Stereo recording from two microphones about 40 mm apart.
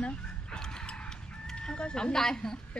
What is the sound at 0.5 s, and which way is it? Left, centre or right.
Mechanisms, left.